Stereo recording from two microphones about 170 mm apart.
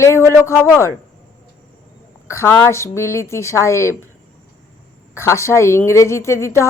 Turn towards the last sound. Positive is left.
turn(degrees=15)  # may be behind; listen again after turning